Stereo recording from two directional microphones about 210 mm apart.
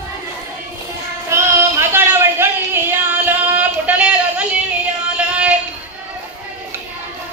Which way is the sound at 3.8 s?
5° right (ahead or behind).